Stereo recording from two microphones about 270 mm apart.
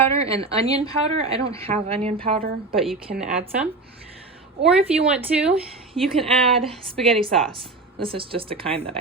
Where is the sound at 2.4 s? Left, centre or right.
Right.